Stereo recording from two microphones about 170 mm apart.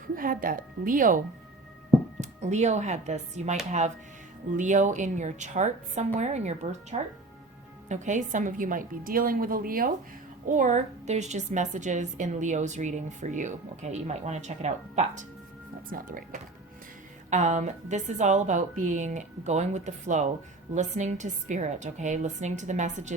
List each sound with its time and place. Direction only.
0.2 s a woman's voice: 55° right (ahead or behind)
2.4 s a woman's voice: 45° right (ahead or behind)
15.9 s a woman's voice: 55° right (ahead or behind)